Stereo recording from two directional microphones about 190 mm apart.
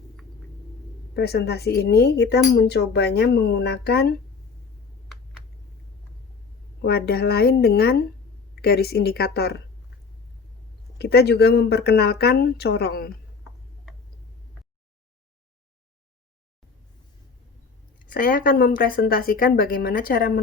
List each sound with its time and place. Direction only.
1.1 s speech: 55° left (ahead or behind)
6.8 s speech: 55° left (ahead or behind)
10.9 s speech: 60° left (ahead or behind)
18.0 s a woman's voice: 45° left (ahead or behind)